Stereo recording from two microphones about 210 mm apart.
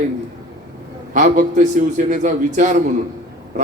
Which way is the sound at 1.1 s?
35° right (ahead or behind).